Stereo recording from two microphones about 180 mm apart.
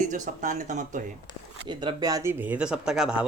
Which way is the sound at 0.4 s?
40° right (ahead or behind).